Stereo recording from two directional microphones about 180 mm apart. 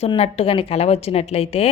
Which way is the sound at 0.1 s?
30° left (ahead or behind).